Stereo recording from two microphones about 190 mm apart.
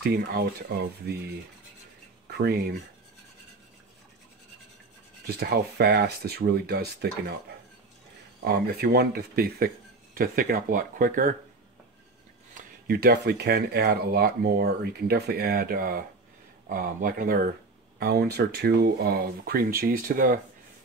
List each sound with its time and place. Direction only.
0.0 s speech: 55° right (ahead or behind)
5.2 s speech: 55° right (ahead or behind)
8.4 s speech: 55° right (ahead or behind)
12.5 s speech: 55° right (ahead or behind)